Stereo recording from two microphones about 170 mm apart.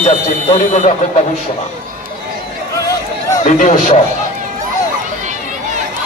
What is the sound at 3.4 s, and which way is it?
Speech, 45° left (ahead or behind).